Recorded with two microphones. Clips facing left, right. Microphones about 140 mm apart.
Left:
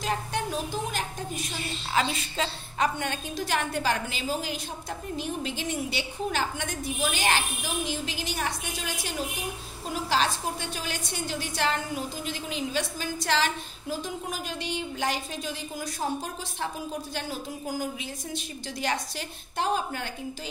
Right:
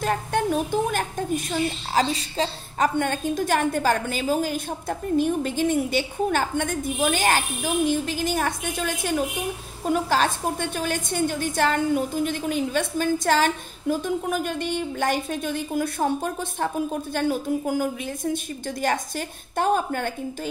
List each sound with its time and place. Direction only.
0.0 s a woman's voice: 55° right (ahead or behind)
2.1 s a woman's voice: 35° right (ahead or behind)
3.0 s a woman's voice: 50° right (ahead or behind)